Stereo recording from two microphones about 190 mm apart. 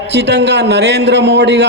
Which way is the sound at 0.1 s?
60° right (ahead or behind).